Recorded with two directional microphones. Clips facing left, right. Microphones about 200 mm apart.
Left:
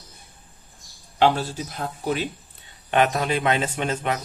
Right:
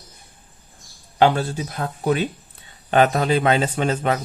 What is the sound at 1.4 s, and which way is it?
Speech, 60° right (ahead or behind).